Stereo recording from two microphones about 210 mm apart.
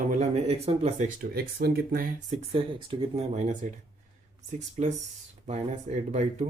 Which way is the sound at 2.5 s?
25° right (ahead or behind).